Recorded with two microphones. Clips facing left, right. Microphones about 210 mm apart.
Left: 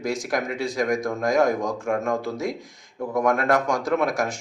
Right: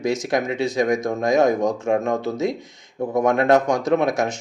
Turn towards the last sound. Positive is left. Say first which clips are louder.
# right 4 dB
turn(degrees=-20)  # may be behind; listen again after turning